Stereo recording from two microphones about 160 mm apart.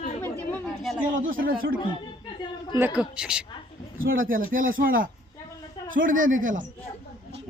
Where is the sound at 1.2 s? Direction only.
60° right (ahead or behind).